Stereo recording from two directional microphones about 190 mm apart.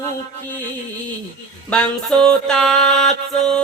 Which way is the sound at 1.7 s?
5° left (ahead or behind).